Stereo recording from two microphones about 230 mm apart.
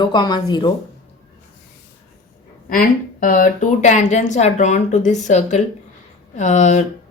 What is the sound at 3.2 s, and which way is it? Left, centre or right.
Speech, left.